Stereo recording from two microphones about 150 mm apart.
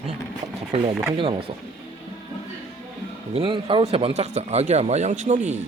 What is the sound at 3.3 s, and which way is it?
Speech, 35° right (ahead or behind).